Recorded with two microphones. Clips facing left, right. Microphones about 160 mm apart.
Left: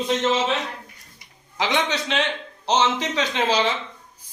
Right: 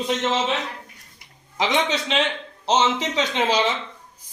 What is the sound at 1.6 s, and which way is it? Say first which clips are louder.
A man's voice: right 1 dB; 25° right (ahead or behind).